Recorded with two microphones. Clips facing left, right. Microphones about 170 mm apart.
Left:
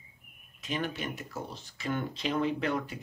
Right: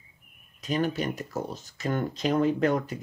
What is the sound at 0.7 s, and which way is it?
Speech, 40° right (ahead or behind).